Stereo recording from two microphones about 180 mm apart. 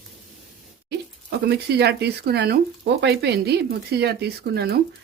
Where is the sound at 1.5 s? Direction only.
65° right (ahead or behind).